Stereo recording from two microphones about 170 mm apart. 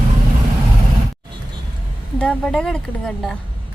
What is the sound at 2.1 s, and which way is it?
Speech, 5° left (ahead or behind).